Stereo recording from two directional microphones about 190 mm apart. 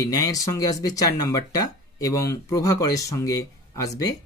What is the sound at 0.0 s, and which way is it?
Speech, 20° left (ahead or behind).